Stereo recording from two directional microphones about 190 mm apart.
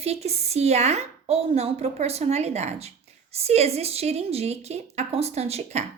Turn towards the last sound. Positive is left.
turn(degrees=-35)  # may be behind; listen again after turning